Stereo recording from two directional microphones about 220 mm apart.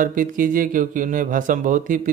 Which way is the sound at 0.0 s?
40° right (ahead or behind).